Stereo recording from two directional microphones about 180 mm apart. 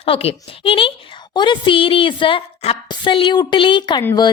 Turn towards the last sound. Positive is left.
turn(degrees=25)  # may be behind; listen again after turning